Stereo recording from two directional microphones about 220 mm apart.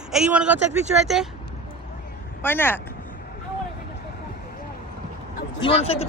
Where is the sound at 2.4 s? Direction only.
10° left (ahead or behind).